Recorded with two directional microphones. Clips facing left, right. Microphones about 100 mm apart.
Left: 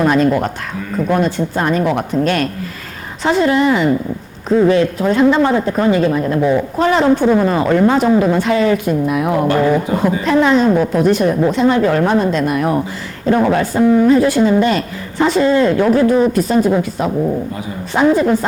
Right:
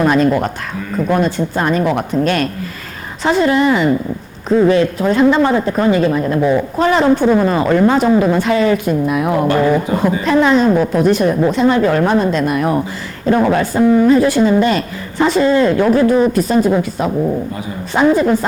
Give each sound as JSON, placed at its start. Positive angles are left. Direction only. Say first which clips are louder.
{"t": 0.0, "sound": "speech", "louder": "even", "side_deg": -20}
{"t": 2.2, "sound": "speech", "louder": "even", "side_deg": -15}